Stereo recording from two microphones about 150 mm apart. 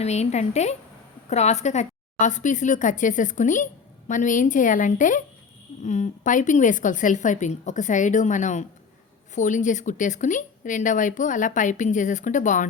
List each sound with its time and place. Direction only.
0.0 s a woman's voice: 45° left (ahead or behind)